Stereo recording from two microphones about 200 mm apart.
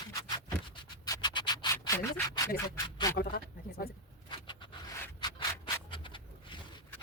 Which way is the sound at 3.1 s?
50° left (ahead or behind).